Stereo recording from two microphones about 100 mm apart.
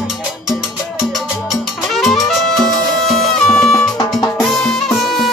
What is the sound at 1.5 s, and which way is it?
Music, centre (ahead or behind).